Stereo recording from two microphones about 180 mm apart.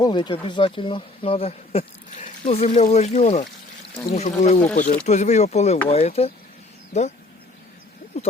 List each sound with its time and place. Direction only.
0.0 s speech: 25° left (ahead or behind)